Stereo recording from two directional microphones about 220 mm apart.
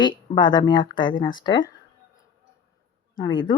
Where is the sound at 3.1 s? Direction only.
20° left (ahead or behind).